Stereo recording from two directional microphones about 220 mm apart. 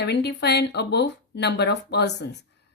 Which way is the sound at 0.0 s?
50° left (ahead or behind).